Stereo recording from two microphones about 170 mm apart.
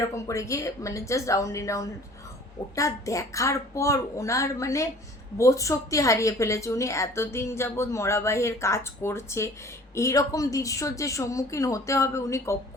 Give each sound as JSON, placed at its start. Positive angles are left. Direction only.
{"t": 0.0, "sound": "a woman's voice", "side_deg": 20}